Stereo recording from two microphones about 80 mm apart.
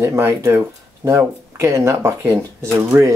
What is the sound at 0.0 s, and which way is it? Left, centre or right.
Speech, right.